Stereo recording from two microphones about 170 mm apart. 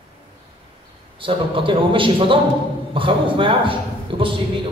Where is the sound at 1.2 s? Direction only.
30° right (ahead or behind).